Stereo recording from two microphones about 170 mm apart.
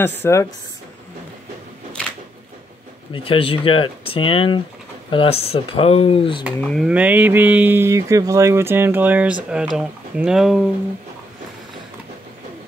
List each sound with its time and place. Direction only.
0.0 s speech: 15° left (ahead or behind)
3.1 s speech: 30° left (ahead or behind)
6.7 s speech: 5° right (ahead or behind)